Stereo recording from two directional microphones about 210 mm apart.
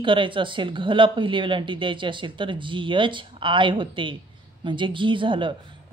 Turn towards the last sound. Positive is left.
turn(degrees=-25)  # may be behind; listen again after turning